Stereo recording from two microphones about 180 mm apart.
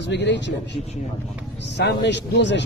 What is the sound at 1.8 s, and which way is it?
Speech, 70° left (ahead or behind).